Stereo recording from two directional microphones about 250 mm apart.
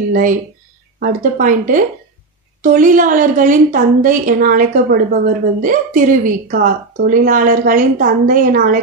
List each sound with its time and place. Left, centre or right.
0.1 s a woman's voice: right